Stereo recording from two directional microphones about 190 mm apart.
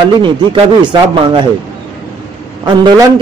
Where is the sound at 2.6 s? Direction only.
25° right (ahead or behind).